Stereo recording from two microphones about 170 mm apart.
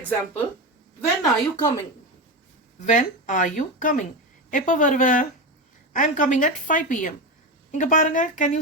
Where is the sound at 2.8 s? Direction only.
45° left (ahead or behind).